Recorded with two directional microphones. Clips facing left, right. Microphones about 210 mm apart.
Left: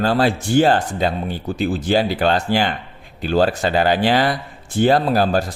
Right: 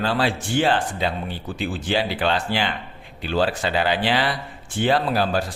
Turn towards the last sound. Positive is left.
turn(degrees=40)  # may be behind; listen again after turning